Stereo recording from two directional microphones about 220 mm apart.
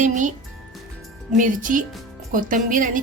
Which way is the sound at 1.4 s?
35° right (ahead or behind).